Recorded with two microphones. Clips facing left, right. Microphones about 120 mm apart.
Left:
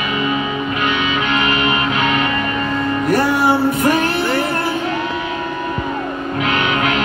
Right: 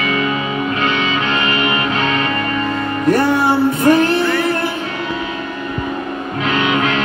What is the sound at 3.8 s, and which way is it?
Music, 25° right (ahead or behind).